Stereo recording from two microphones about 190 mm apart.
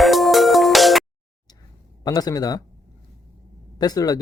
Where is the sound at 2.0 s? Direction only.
20° left (ahead or behind).